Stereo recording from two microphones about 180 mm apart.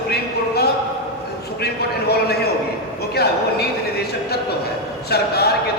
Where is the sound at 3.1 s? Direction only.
65° left (ahead or behind).